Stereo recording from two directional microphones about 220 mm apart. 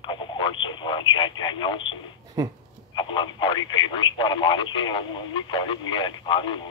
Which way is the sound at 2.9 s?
20° left (ahead or behind).